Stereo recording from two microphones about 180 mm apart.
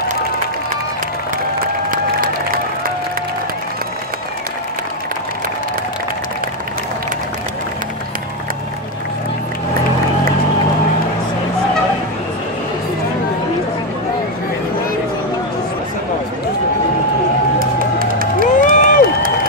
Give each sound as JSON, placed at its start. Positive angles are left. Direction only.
{"t": 1.9, "sound": "applause", "side_deg": -50}
{"t": 17.6, "sound": "crowd", "side_deg": -55}
{"t": 18.6, "sound": "crowd", "side_deg": 45}